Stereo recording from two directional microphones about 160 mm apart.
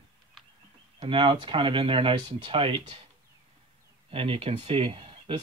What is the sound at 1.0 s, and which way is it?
Speech, 30° right (ahead or behind).